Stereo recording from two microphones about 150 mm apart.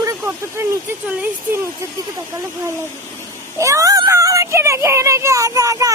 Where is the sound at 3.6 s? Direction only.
20° right (ahead or behind).